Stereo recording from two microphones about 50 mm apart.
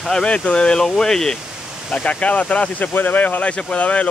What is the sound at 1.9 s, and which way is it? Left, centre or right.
Speech, left.